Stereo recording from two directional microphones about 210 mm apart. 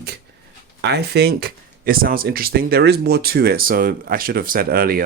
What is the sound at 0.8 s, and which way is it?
Speech, 50° right (ahead or behind).